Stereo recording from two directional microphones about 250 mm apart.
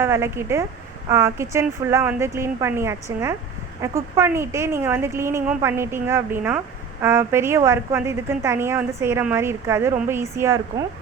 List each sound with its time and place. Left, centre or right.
0.0 s a woman's voice: centre